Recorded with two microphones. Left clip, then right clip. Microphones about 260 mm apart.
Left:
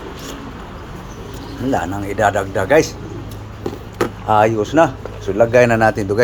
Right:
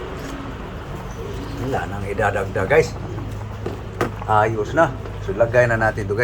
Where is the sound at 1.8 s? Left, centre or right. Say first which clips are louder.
Left 4 dB; left.